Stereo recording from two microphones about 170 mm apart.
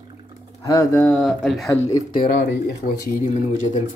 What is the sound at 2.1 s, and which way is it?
Speech, 60° left (ahead or behind).